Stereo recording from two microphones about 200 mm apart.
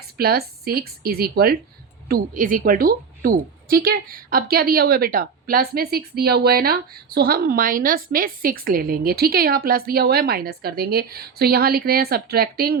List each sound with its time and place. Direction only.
0.2 s a woman's voice: 50° right (ahead or behind)